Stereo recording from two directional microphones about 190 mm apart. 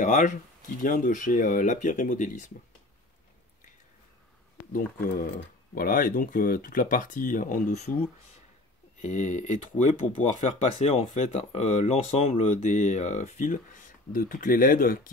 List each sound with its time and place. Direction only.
0.0 s speech: 40° left (ahead or behind)
4.7 s speech: 45° left (ahead or behind)
9.0 s speech: 35° left (ahead or behind)